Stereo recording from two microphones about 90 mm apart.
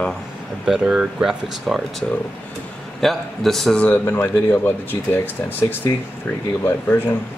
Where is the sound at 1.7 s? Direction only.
5° left (ahead or behind).